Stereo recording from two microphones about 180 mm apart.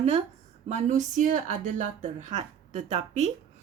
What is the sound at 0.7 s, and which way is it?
A woman's voice, 40° right (ahead or behind).